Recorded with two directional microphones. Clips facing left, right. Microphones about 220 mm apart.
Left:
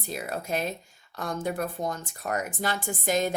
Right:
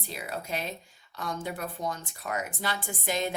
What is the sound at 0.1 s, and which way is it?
A woman's voice, 45° left (ahead or behind).